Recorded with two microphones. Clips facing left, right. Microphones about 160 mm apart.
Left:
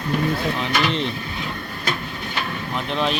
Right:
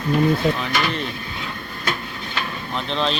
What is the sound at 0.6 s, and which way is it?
Speech, 25° left (ahead or behind).